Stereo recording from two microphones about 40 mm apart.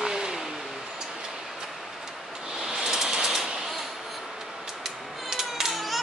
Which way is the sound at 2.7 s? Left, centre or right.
Centre.